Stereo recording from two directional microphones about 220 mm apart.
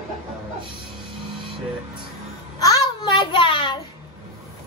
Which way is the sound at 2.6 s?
15° left (ahead or behind).